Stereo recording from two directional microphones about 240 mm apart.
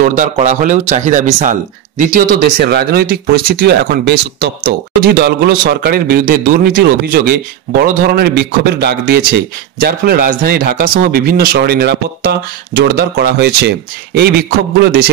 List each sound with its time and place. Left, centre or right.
0.0 s speech: right